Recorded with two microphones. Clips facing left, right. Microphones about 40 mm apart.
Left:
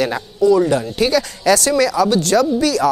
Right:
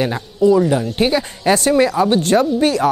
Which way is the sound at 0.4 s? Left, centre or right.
Right.